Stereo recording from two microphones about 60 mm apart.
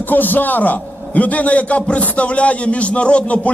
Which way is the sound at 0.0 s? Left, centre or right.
Left.